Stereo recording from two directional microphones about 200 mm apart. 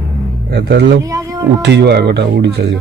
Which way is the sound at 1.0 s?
15° right (ahead or behind).